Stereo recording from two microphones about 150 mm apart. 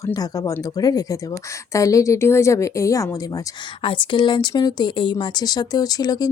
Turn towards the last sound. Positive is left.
turn(degrees=25)  # may be behind; listen again after turning